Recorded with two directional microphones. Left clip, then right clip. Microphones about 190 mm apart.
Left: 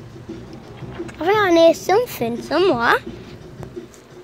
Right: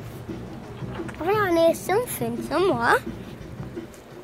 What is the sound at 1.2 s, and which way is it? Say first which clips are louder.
A woman's voice: left 7 dB; 30° left (ahead or behind).